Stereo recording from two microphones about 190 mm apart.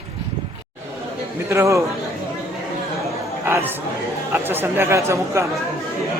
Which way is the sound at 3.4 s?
10° right (ahead or behind).